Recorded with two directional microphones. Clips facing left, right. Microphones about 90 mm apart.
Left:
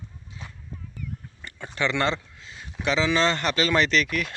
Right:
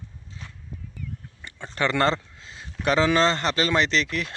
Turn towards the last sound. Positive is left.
turn(degrees=-30)  # may be behind; listen again after turning